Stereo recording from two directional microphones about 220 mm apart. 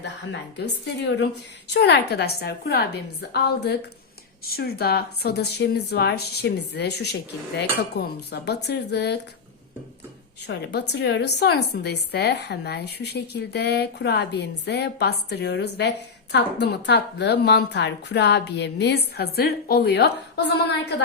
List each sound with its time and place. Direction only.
0.0 s a woman's voice: 50° left (ahead or behind)
10.4 s a woman's voice: 50° left (ahead or behind)